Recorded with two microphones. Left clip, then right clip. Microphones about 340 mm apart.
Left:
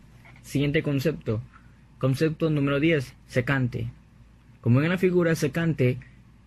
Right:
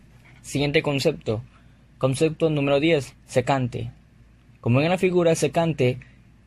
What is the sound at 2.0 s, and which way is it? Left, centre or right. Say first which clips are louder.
Speech: right 4 dB; centre.